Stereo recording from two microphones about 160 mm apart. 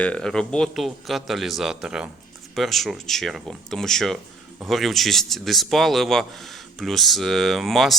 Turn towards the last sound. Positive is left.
turn(degrees=0)  # may be behind; listen again after turning